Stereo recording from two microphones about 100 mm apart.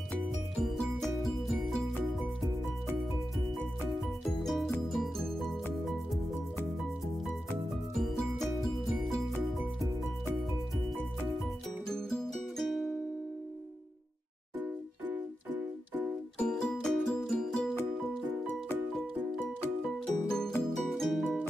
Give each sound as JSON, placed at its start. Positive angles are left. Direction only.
{"t": 0.6, "sound": "music", "side_deg": 0}
{"t": 4.4, "sound": "music", "side_deg": 0}
{"t": 7.9, "sound": "music", "side_deg": 0}
{"t": 11.9, "sound": "music", "side_deg": 5}
{"t": 14.6, "sound": "music", "side_deg": -15}
{"t": 16.3, "sound": "music", "side_deg": 10}
{"t": 20.2, "sound": "music", "side_deg": 5}